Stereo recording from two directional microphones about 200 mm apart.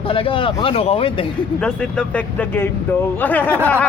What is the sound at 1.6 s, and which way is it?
Speech, 5° left (ahead or behind).